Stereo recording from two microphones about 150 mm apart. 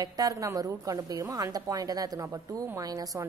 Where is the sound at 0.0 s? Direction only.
25° right (ahead or behind).